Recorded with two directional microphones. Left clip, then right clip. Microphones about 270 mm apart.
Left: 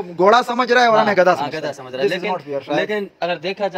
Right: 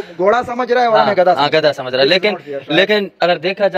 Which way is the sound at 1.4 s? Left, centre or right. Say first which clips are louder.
Right 11 dB; right.